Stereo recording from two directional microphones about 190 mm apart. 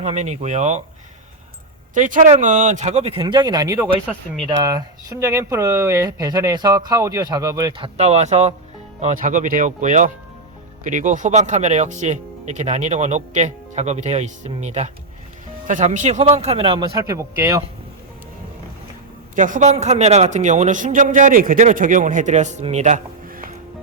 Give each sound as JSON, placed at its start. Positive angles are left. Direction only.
{"t": 0.0, "sound": "speech", "side_deg": -35}
{"t": 2.0, "sound": "speech", "side_deg": -40}
{"t": 19.4, "sound": "speech", "side_deg": -40}